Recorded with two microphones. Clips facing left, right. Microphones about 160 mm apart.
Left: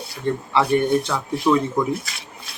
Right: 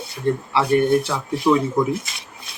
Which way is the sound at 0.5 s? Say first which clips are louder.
Right 1 dB; 5° right (ahead or behind).